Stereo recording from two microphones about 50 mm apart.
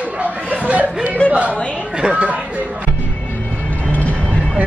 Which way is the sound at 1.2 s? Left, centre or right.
Left.